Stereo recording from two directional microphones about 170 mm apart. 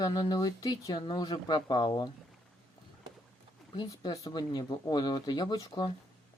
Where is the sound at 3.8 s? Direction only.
20° left (ahead or behind).